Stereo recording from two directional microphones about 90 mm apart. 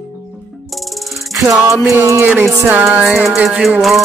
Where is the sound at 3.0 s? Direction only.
5° right (ahead or behind).